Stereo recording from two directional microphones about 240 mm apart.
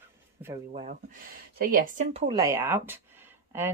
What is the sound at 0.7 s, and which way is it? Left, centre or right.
Speech, right.